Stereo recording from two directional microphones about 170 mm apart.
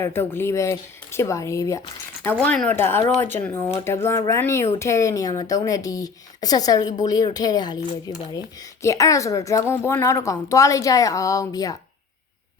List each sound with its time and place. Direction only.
0.0 s a woman's voice: 15° left (ahead or behind)